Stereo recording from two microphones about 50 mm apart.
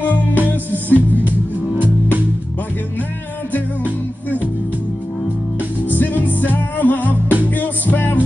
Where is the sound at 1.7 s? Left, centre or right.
Right.